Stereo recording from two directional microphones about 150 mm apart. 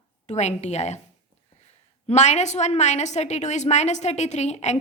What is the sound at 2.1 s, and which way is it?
A woman's voice, 50° left (ahead or behind).